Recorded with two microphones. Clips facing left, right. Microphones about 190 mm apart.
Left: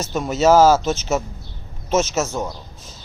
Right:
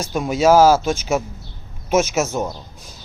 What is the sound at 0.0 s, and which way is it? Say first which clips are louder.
Speech: right 1 dB; 10° right (ahead or behind).